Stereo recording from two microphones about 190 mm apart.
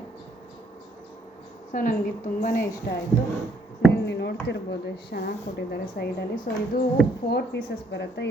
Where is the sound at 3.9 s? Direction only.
60° left (ahead or behind).